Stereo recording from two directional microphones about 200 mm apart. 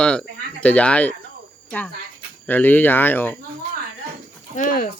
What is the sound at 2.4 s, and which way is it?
Speech, 10° left (ahead or behind).